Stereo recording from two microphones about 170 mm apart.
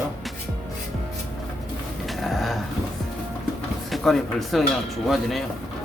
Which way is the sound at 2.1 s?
Centre (ahead or behind).